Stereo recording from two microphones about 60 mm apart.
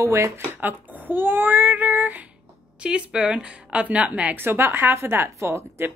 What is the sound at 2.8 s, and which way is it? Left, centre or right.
A woman's voice, centre.